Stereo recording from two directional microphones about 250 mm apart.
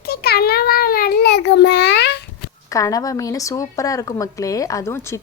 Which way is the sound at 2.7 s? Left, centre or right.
Centre.